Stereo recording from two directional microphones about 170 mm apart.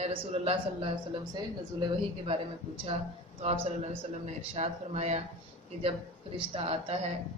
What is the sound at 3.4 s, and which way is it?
A man's voice, 40° right (ahead or behind).